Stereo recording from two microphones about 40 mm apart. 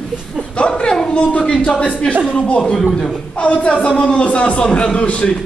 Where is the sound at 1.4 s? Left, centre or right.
Left.